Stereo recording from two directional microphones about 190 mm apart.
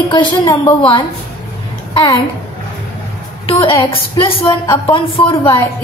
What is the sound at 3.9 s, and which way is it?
A woman's voice, 30° left (ahead or behind).